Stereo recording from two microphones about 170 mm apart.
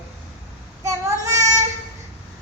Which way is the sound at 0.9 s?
20° right (ahead or behind).